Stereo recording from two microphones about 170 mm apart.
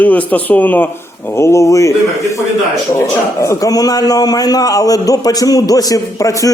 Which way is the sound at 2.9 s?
15° left (ahead or behind).